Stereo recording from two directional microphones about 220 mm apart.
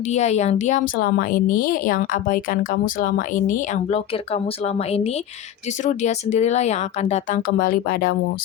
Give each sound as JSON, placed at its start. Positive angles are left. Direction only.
{"t": 0.1, "sound": "speech", "side_deg": 30}
{"t": 1.0, "sound": "speech", "side_deg": 45}